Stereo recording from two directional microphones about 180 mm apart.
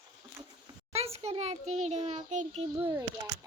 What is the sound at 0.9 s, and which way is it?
A child's voice, 35° right (ahead or behind).